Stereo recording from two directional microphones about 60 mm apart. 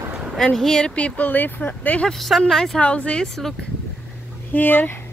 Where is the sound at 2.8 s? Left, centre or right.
Centre.